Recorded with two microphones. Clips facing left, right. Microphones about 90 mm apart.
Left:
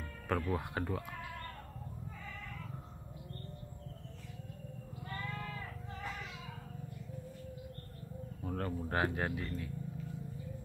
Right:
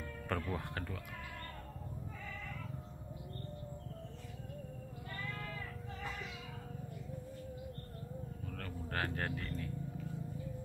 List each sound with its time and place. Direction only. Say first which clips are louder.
0.3 s speech: left 4 dB; 10° left (ahead or behind)
8.5 s speech: left 9 dB; 25° left (ahead or behind); by 9.7 s 5° left (ahead or behind)